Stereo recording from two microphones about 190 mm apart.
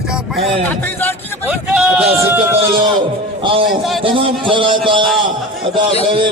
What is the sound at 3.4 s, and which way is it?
A man's voice, 25° right (ahead or behind).